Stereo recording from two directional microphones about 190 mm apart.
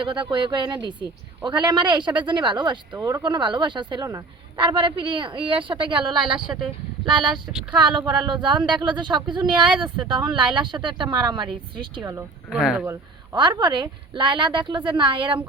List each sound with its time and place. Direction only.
0.0 s a man's voice: 25° right (ahead or behind)
12.5 s speech: centre (ahead or behind)
12.8 s a man's voice: 20° right (ahead or behind)